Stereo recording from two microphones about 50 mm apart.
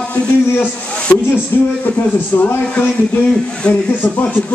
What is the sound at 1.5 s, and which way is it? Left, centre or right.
Speech, left.